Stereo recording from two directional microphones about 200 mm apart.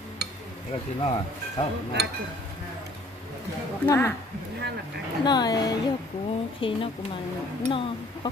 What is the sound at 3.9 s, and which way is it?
Speech, 15° left (ahead or behind).